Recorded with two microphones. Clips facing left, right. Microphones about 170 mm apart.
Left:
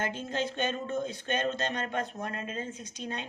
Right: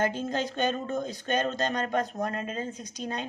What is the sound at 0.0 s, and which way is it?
Speech, 40° right (ahead or behind).